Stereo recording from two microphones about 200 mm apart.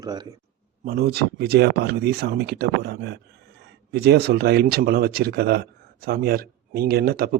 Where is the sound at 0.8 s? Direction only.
50° right (ahead or behind).